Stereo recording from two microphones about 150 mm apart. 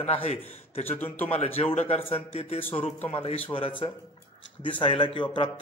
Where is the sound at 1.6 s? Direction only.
45° left (ahead or behind).